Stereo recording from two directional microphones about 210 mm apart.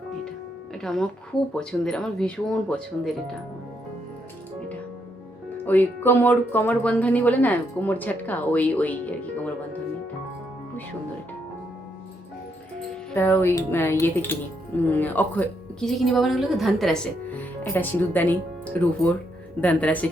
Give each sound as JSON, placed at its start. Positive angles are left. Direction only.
{"t": 0.7, "sound": "speech", "side_deg": 0}
{"t": 5.6, "sound": "speech", "side_deg": 10}
{"t": 13.1, "sound": "speech", "side_deg": 10}